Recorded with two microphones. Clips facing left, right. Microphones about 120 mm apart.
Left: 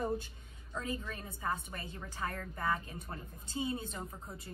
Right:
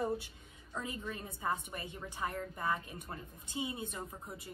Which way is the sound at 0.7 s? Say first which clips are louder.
Left 1 dB; 20° right (ahead or behind).